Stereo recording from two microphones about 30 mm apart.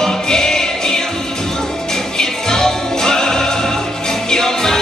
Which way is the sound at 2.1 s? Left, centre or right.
Centre.